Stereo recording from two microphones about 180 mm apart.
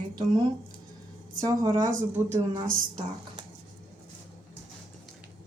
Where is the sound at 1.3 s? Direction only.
20° right (ahead or behind).